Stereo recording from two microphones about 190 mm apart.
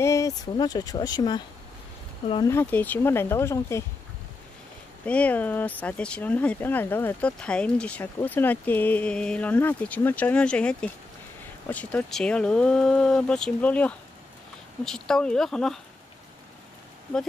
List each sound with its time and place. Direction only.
0.0 s speech: 15° left (ahead or behind)
2.4 s speech: 10° left (ahead or behind)
5.0 s speech: 5° left (ahead or behind)